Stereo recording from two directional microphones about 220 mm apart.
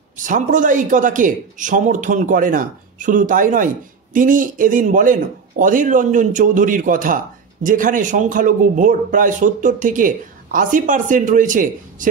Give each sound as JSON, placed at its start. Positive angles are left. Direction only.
{"t": 0.2, "sound": "a man's voice", "side_deg": -35}